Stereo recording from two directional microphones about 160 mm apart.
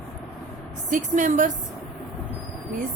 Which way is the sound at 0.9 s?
50° right (ahead or behind).